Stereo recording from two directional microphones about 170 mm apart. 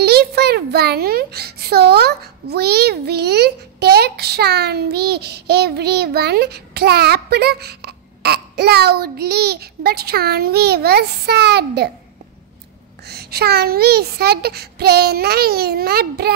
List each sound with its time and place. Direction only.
0.0 s a child's voice: 70° right (ahead or behind)
13.0 s a child's voice: 70° right (ahead or behind)